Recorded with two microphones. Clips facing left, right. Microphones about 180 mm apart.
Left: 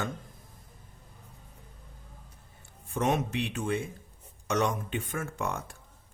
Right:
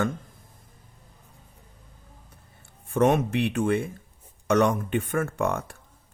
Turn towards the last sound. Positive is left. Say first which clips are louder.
# right 7 dB
turn(degrees=-60)  # may be behind; listen again after turning